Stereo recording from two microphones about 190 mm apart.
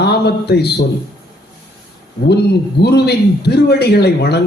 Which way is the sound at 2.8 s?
60° left (ahead or behind).